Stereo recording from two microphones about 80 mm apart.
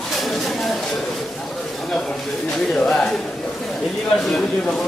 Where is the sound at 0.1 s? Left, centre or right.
Centre.